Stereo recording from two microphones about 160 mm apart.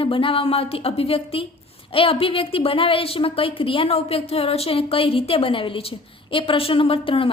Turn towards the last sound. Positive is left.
turn(degrees=35)  # may be behind; listen again after turning